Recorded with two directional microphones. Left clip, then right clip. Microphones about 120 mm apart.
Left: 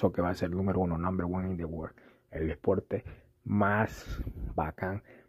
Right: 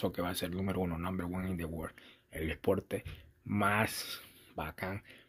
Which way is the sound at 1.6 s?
5° left (ahead or behind).